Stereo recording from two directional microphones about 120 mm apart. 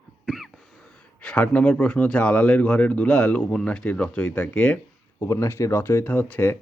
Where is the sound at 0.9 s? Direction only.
10° left (ahead or behind).